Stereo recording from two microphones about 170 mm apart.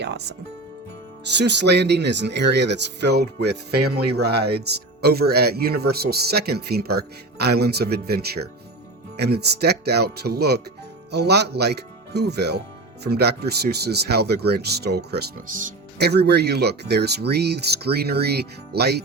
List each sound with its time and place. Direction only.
0.0 s speech: 80° right
1.2 s speech: 90° right; by 19.0 s 75° right (ahead or behind)